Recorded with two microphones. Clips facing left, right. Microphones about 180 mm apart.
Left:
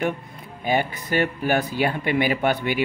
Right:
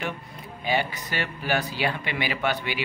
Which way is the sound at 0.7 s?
50° left (ahead or behind).